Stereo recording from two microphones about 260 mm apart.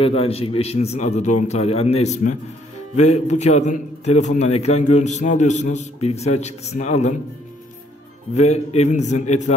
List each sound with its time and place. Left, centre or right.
0.0 s a man's voice: left
8.4 s a man's voice: left